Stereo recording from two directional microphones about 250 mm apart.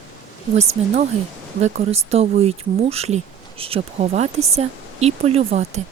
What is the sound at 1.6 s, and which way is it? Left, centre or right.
Speech, right.